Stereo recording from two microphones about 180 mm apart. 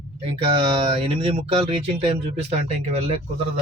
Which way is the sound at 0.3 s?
30° right (ahead or behind).